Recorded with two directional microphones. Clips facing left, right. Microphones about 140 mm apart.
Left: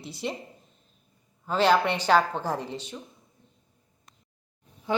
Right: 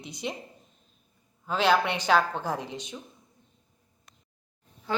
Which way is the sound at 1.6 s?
10° right (ahead or behind).